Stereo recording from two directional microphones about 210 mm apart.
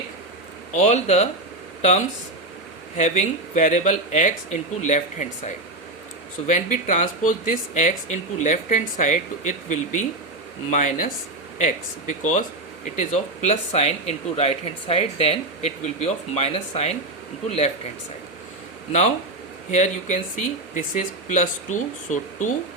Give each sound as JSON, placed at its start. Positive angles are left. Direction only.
{"t": 0.7, "sound": "speech", "side_deg": 35}
{"t": 18.9, "sound": "speech", "side_deg": 35}